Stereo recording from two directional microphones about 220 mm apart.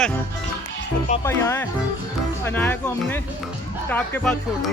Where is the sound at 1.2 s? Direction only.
10° left (ahead or behind).